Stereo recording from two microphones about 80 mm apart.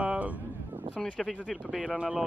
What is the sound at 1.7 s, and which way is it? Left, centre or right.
Speech, centre.